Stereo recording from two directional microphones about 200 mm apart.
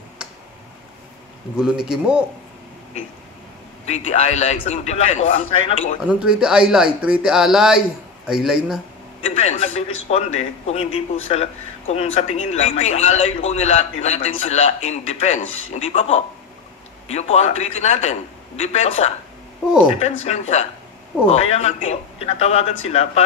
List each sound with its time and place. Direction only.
1.9 s speech: 5° right (ahead or behind)
3.8 s a man's voice: 35° left (ahead or behind)
5.9 s speech: 5° right (ahead or behind)
9.2 s a man's voice: 35° left (ahead or behind)
15.4 s speech: 85° left
15.7 s a man's voice: 35° left (ahead or behind)
20.2 s a man's voice: 35° left (ahead or behind)